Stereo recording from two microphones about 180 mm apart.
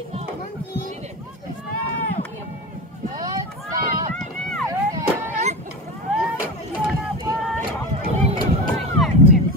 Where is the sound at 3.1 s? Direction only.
20° right (ahead or behind).